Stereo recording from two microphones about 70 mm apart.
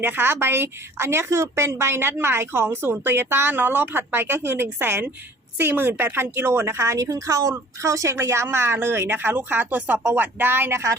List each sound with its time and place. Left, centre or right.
0.0 s a woman's voice: right